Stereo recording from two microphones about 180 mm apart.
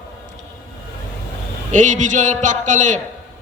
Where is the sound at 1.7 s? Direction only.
45° right (ahead or behind).